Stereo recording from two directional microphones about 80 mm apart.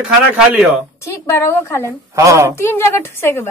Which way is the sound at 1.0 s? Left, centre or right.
Left.